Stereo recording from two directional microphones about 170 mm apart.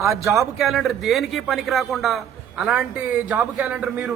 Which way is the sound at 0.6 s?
Centre (ahead or behind).